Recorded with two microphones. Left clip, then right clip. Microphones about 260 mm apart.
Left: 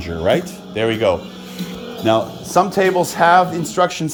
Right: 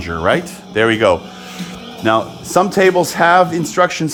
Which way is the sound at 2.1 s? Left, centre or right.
Right.